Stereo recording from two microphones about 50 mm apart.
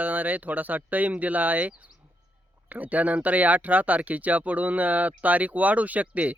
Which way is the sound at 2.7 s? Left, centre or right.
Right.